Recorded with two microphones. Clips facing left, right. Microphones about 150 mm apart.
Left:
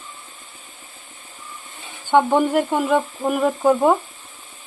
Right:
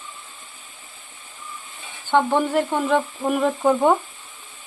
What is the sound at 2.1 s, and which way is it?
Frying, 15° left (ahead or behind).